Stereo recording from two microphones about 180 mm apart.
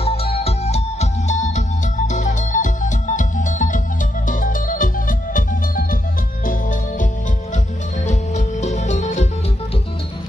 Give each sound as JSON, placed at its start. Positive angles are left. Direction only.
{"t": 0.0, "sound": "music", "side_deg": 35}
{"t": 8.1, "sound": "music", "side_deg": 40}